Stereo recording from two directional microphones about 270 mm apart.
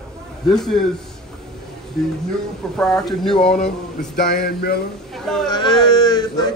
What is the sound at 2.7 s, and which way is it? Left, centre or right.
Speech, centre.